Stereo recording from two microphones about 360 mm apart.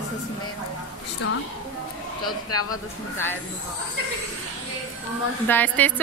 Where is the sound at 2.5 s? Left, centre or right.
Left.